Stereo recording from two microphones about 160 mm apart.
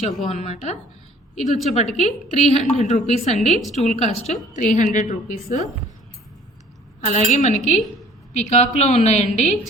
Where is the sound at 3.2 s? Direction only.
5° left (ahead or behind).